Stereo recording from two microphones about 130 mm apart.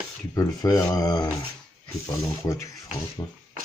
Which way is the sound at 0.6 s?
25° left (ahead or behind).